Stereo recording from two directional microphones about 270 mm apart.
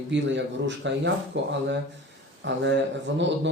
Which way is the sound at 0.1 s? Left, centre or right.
Right.